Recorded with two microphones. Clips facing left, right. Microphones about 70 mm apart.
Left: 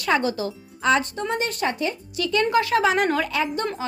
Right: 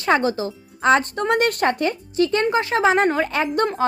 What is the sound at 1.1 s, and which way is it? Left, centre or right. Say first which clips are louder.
Speech: right 6 dB; right.